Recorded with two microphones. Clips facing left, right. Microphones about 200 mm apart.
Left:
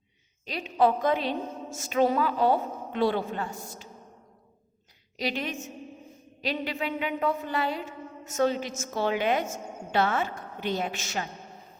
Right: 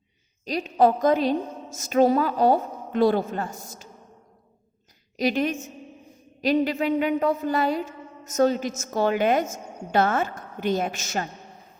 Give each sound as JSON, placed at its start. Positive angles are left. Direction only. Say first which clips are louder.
{"t": 0.4, "sound": "a woman's voice", "louder": "right 4 dB", "side_deg": -40}
{"t": 5.1, "sound": "a woman's voice", "louder": "right 8 dB", "side_deg": -45}